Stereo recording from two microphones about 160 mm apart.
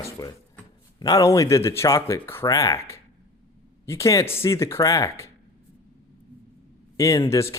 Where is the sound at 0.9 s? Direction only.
20° left (ahead or behind).